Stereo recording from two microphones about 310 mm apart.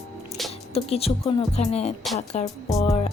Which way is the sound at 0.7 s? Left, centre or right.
Centre.